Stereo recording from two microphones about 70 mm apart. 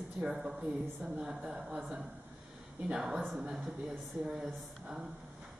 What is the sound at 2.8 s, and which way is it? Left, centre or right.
A woman's voice, centre.